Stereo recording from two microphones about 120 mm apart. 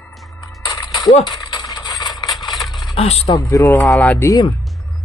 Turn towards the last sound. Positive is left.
turn(degrees=15)  # may be behind; listen again after turning